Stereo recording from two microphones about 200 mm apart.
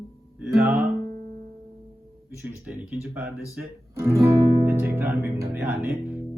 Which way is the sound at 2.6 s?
5° right (ahead or behind).